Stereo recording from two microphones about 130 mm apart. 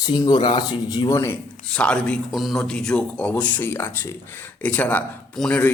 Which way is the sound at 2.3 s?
Centre (ahead or behind).